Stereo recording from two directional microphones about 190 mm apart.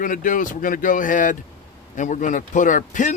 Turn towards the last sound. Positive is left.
turn(degrees=40)  # may be behind; listen again after turning